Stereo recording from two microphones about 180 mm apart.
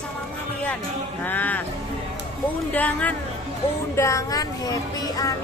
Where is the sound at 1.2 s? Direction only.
10° left (ahead or behind).